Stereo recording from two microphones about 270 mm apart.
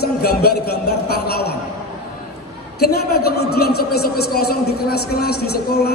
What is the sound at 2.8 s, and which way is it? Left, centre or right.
A woman's voice, left.